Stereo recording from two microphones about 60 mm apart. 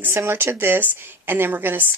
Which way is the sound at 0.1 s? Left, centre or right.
Right.